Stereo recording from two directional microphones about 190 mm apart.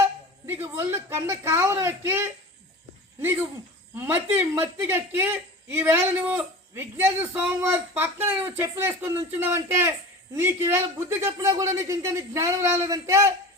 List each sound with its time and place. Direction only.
0.0 s speech: 10° right (ahead or behind)